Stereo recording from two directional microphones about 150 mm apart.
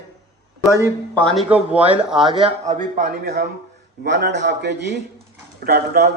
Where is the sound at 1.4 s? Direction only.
10° right (ahead or behind).